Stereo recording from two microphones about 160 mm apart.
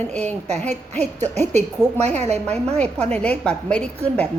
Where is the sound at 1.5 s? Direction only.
45° right (ahead or behind).